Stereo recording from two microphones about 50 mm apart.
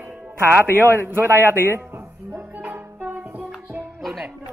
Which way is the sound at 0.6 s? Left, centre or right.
Right.